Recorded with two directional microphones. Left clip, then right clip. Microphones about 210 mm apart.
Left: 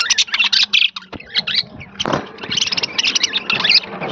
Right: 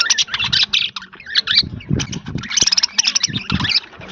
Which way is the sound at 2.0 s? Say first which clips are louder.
Left 7 dB; 30° right (ahead or behind).